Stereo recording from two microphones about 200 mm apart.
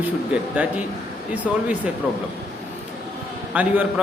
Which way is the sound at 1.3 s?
5° right (ahead or behind).